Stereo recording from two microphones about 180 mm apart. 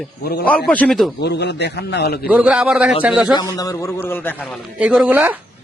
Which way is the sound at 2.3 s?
5° right (ahead or behind).